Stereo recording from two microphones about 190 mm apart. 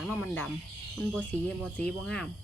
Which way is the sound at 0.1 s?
10° left (ahead or behind).